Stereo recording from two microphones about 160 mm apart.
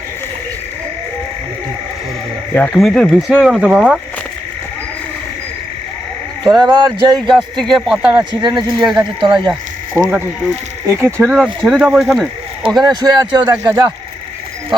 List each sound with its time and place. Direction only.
2.6 s speech: 5° left (ahead or behind)
6.4 s speech: 25° right (ahead or behind)
7.5 s speech: centre (ahead or behind)
8.4 s speech: 25° right (ahead or behind)
8.8 s speech: 5° right (ahead or behind)
9.2 s speech: 30° right (ahead or behind)
9.9 s speech: 15° right (ahead or behind)
11.3 s speech: centre (ahead or behind)
12.8 s speech: 25° right (ahead or behind)